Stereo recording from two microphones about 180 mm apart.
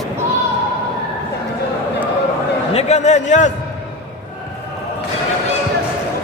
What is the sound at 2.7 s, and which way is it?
Speech, 40° left (ahead or behind).